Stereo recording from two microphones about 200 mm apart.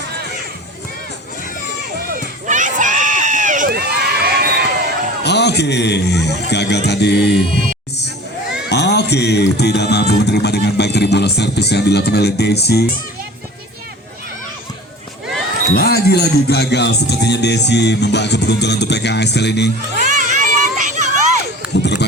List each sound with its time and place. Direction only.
2.5 s crowd: 40° right (ahead or behind)
5.2 s music: 55° left (ahead or behind)
8.7 s music: 55° left (ahead or behind)
15.7 s music: 50° left (ahead or behind)
20.0 s crowd: 40° right (ahead or behind)